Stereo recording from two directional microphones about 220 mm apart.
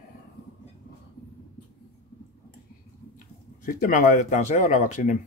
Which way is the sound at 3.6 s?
35° left (ahead or behind).